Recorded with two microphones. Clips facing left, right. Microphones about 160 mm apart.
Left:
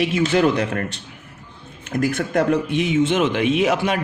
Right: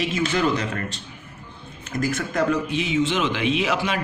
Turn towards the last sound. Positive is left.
turn(degrees=50)  # may be behind; listen again after turning